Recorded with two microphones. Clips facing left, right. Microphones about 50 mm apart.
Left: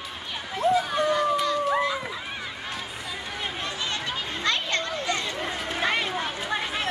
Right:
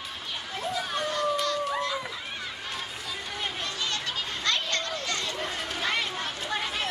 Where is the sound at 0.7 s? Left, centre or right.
Centre.